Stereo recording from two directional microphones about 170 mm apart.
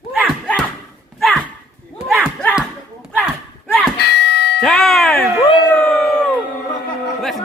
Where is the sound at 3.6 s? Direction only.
10° left (ahead or behind).